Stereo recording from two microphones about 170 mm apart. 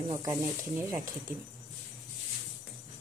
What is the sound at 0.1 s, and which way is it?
Speech, 20° right (ahead or behind).